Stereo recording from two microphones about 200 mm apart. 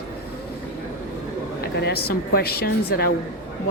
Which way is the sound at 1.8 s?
50° left (ahead or behind).